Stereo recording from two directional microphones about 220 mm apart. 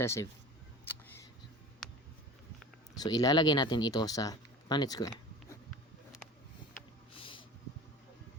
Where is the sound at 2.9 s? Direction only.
15° left (ahead or behind).